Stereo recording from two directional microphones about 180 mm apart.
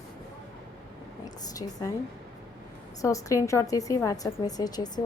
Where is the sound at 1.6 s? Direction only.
30° left (ahead or behind).